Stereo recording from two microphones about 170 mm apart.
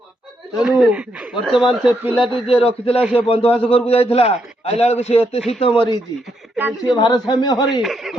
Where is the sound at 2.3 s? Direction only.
35° left (ahead or behind).